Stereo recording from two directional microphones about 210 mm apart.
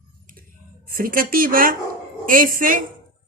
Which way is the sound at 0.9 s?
45° right (ahead or behind).